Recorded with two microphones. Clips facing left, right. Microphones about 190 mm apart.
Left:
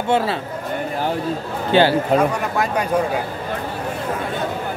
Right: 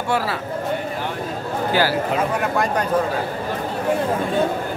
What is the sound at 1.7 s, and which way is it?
Speech, 25° left (ahead or behind).